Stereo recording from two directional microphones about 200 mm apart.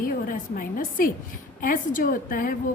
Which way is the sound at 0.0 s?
45° left (ahead or behind).